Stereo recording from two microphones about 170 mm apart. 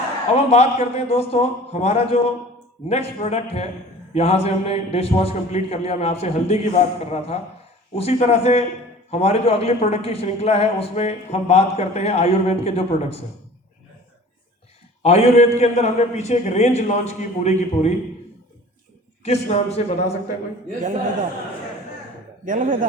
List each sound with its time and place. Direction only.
0.3 s a man's voice: 35° left (ahead or behind)
15.0 s a man's voice: 40° left (ahead or behind)
19.2 s a man's voice: 40° left (ahead or behind)
22.4 s speech: 55° right (ahead or behind)